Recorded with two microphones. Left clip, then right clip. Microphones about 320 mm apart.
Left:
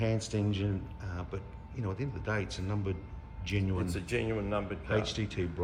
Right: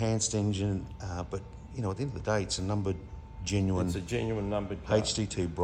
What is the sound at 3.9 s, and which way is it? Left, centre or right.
Speech, right.